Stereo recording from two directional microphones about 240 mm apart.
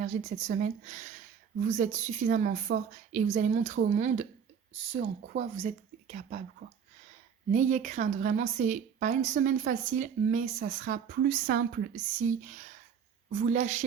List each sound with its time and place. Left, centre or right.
0.0 s speech: right
7.5 s speech: right